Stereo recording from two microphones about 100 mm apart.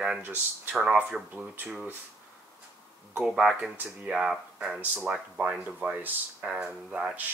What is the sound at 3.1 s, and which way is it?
Speech, 5° right (ahead or behind).